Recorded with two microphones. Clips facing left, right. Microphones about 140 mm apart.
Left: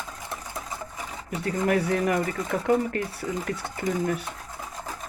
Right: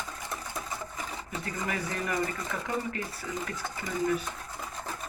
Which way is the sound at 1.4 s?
65° left (ahead or behind).